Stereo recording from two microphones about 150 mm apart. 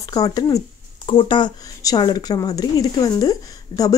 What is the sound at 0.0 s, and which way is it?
Speech, 25° left (ahead or behind).